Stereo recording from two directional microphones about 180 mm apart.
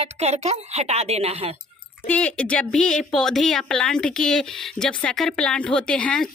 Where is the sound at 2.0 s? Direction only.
5° left (ahead or behind).